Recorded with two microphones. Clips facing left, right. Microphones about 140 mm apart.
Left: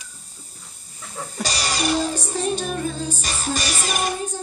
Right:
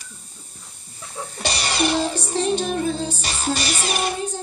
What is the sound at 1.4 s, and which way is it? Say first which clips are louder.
Music: right 2 dB; 40° left (ahead or behind).